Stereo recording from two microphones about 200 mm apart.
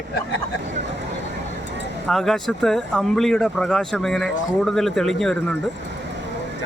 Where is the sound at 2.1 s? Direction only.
Centre (ahead or behind).